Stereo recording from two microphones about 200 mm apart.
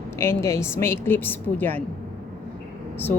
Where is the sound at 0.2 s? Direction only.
15° left (ahead or behind).